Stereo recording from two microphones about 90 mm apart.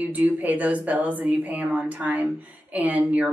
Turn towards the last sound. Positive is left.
turn(degrees=-15)  # may be behind; listen again after turning